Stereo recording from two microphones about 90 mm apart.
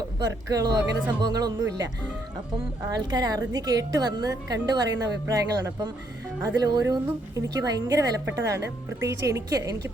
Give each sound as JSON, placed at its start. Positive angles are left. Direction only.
{"t": 0.2, "sound": "a woman's voice", "side_deg": -45}
{"t": 2.9, "sound": "a woman's voice", "side_deg": -45}
{"t": 8.4, "sound": "speech", "side_deg": -35}